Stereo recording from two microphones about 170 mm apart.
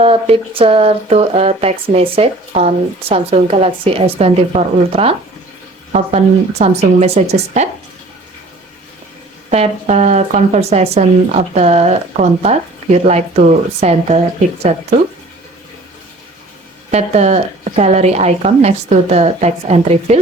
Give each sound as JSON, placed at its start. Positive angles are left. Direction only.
{"t": 0.0, "sound": "speech", "side_deg": -35}
{"t": 9.5, "sound": "speech", "side_deg": -40}
{"t": 16.9, "sound": "speech", "side_deg": -40}